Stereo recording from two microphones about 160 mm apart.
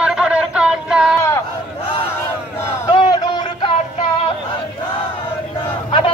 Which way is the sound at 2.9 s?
30° left (ahead or behind).